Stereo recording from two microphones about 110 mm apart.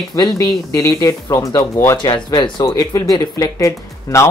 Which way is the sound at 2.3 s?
45° left (ahead or behind).